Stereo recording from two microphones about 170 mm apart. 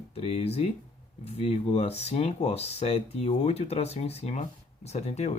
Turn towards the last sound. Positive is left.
turn(degrees=40)  # may be behind; listen again after turning